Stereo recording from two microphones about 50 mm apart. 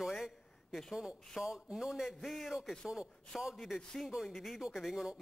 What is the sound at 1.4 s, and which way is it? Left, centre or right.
Speech, centre.